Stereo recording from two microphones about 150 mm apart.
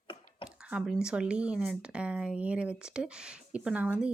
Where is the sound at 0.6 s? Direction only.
5° right (ahead or behind).